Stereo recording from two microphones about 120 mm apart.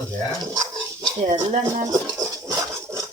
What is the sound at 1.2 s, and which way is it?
Speech, 65° right (ahead or behind).